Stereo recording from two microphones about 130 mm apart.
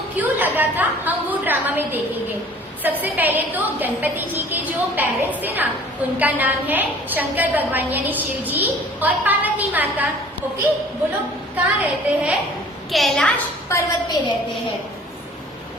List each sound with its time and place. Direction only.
0.2 s a sound: 15° right (ahead or behind)
2.8 s a woman's voice: 15° right (ahead or behind)
11.5 s a woman's voice: 15° right (ahead or behind)
12.9 s a child's voice: centre (ahead or behind)
13.7 s a woman's voice: 20° left (ahead or behind)